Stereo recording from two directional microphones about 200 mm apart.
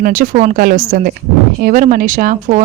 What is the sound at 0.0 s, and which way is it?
A woman's voice, 40° right (ahead or behind).